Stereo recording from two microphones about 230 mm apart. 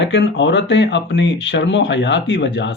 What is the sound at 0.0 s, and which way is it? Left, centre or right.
Speech, left.